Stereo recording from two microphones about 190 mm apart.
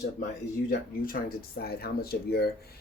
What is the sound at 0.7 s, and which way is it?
Speech, 50° left (ahead or behind).